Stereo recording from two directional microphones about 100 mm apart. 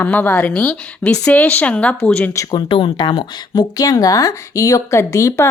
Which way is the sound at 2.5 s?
55° left (ahead or behind).